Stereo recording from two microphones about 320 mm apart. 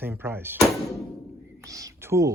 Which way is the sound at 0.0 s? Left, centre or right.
Centre.